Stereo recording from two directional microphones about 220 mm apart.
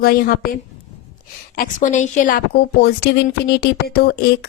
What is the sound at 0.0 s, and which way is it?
A woman's voice, 45° left (ahead or behind).